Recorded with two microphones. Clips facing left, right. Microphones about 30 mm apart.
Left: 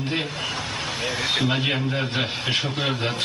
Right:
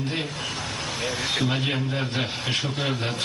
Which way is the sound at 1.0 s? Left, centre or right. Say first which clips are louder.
Left 2 dB; centre.